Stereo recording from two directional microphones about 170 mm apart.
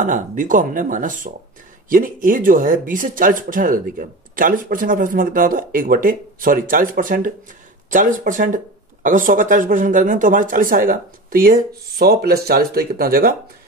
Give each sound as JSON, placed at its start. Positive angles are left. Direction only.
{"t": 0.0, "sound": "speech", "side_deg": -50}